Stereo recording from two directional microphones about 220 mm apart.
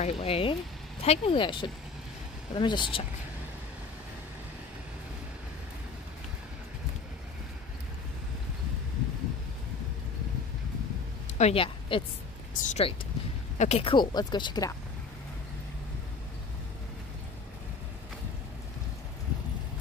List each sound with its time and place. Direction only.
0.0 s speech: 25° left (ahead or behind)
11.2 s a woman's voice: 30° left (ahead or behind)